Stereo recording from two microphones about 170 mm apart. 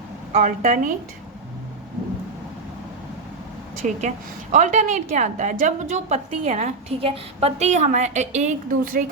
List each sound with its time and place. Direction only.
0.4 s a woman's voice: 50° right (ahead or behind)
3.8 s a woman's voice: 45° right (ahead or behind)